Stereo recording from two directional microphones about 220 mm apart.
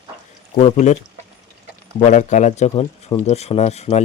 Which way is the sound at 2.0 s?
35° left (ahead or behind).